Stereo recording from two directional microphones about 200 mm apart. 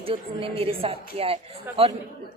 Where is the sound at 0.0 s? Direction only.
25° right (ahead or behind).